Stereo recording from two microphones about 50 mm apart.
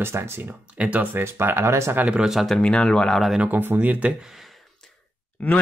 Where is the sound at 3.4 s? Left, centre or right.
Right.